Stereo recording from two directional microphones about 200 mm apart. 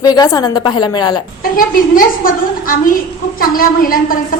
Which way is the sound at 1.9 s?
45° left (ahead or behind).